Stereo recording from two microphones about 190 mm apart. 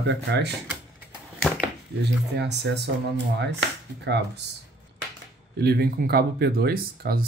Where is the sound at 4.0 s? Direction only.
65° right (ahead or behind).